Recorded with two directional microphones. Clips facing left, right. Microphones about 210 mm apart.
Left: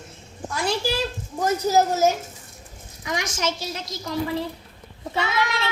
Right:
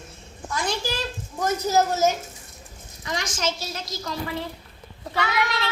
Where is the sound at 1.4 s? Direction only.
10° left (ahead or behind).